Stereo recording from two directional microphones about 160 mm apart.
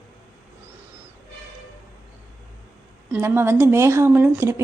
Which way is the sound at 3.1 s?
15° right (ahead or behind).